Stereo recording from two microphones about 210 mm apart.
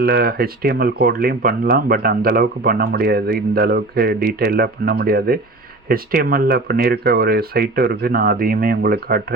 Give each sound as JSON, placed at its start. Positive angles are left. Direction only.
{"t": 0.0, "sound": "speech", "side_deg": -45}